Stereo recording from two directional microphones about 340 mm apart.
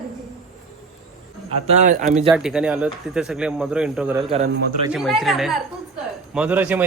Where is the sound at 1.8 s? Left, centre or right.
Right.